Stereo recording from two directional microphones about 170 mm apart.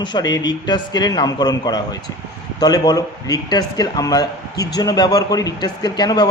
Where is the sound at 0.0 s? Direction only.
25° left (ahead or behind).